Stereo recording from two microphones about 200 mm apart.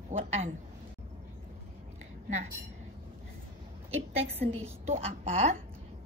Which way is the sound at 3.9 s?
30° right (ahead or behind).